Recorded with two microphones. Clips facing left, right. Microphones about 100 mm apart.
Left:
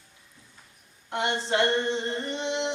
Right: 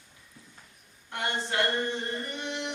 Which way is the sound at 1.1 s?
25° left (ahead or behind).